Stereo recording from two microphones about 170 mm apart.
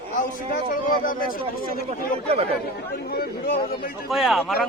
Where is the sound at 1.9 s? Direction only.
35° right (ahead or behind).